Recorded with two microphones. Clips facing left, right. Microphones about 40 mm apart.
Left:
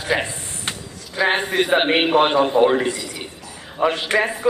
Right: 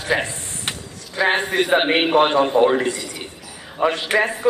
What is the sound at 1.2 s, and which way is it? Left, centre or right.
A man's voice, centre.